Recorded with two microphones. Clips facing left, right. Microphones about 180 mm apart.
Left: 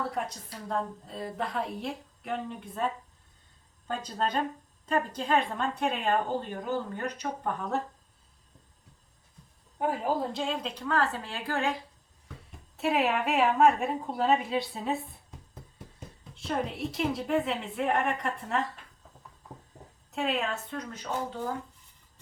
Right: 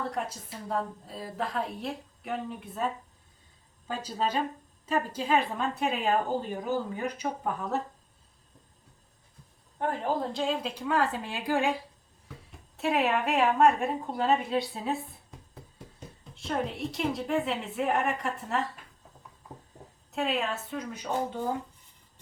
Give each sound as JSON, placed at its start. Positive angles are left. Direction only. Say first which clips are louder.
{"t": 0.0, "sound": "a woman's voice", "louder": "even", "side_deg": 0}
{"t": 9.7, "sound": "a woman's voice", "louder": "left 1 dB", "side_deg": 5}
{"t": 12.4, "sound": "a woman's voice", "louder": "left 1 dB", "side_deg": 0}
{"t": 20.1, "sound": "a woman's voice", "louder": "even", "side_deg": 0}